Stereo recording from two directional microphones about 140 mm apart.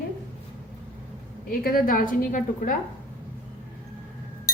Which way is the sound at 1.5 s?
90° left.